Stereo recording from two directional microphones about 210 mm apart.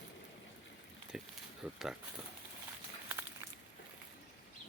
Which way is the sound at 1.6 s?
5° right (ahead or behind).